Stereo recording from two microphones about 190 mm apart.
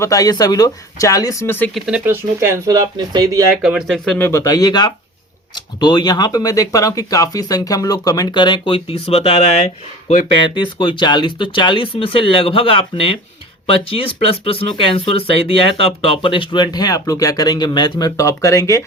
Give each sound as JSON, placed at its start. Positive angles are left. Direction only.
{"t": 0.0, "sound": "speech", "side_deg": 20}
{"t": 1.9, "sound": "speech", "side_deg": -10}
{"t": 3.6, "sound": "speech", "side_deg": -5}
{"t": 4.3, "sound": "speech", "side_deg": 20}
{"t": 14.3, "sound": "speech", "side_deg": 30}